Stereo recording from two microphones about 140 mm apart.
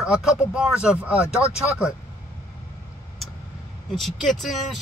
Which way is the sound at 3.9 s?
Centre (ahead or behind).